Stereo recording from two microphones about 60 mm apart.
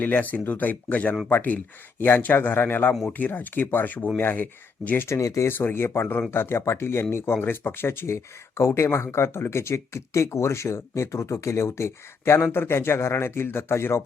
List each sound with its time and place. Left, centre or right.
0.0 s a man's voice: left
5.0 s speech: left
5.5 s a man's voice: left